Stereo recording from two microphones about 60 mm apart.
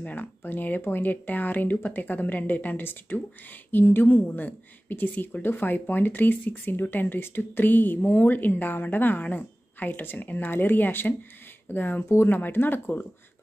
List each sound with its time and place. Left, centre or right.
0.0 s speech: left